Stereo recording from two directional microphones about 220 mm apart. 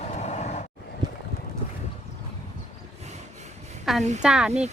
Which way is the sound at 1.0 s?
20° right (ahead or behind).